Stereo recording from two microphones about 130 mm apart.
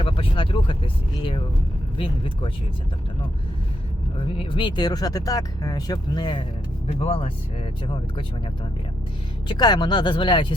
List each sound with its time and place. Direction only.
0.0 s speech: 45° left (ahead or behind)
4.2 s speech: 40° left (ahead or behind)
6.8 s speech: 50° left (ahead or behind)
9.5 s speech: 35° left (ahead or behind)